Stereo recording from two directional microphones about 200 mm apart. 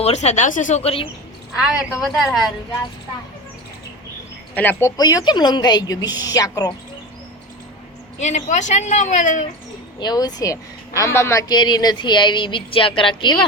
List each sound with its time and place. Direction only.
0.0 s speech: 30° left (ahead or behind)
1.5 s a woman's voice: centre (ahead or behind)
4.5 s a woman's voice: 10° left (ahead or behind)
8.2 s speech: 35° left (ahead or behind)
10.0 s a woman's voice: 20° left (ahead or behind)